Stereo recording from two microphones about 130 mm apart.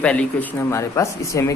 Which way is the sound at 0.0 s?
10° left (ahead or behind).